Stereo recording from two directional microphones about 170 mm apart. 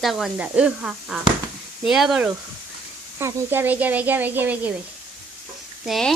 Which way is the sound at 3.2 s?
15° right (ahead or behind).